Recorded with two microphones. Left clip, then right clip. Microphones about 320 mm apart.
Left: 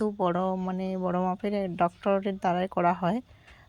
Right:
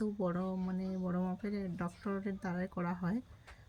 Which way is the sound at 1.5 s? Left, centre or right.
Left.